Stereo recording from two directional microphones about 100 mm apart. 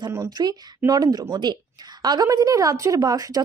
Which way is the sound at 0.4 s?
40° right (ahead or behind).